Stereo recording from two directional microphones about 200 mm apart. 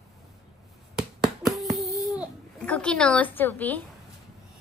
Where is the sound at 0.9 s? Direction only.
Centre (ahead or behind).